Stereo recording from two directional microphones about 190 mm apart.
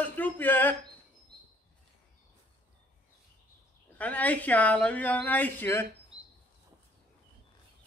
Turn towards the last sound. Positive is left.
turn(degrees=-30)  # may be behind; listen again after turning